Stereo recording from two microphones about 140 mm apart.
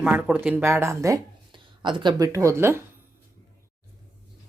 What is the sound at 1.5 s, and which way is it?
Speech, 35° right (ahead or behind).